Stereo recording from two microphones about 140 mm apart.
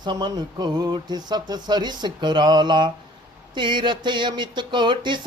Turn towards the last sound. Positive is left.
turn(degrees=-35)  # may be behind; listen again after turning